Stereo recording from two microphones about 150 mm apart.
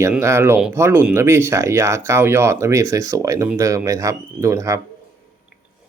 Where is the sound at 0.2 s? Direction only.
20° right (ahead or behind).